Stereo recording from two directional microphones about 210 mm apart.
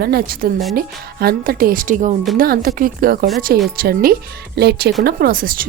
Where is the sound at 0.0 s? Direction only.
45° right (ahead or behind).